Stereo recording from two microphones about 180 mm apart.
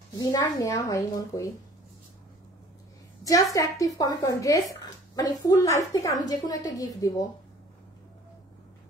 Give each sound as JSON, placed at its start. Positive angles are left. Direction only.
{"t": 0.2, "sound": "a woman's voice", "side_deg": 20}
{"t": 3.3, "sound": "speech", "side_deg": 20}